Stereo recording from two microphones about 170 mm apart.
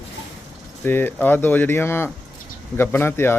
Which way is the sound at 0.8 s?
10° left (ahead or behind).